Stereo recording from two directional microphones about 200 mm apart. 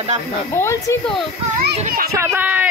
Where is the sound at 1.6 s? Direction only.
50° right (ahead or behind).